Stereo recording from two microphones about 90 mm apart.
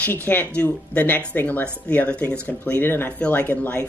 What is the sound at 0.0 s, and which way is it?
Speech, 20° left (ahead or behind).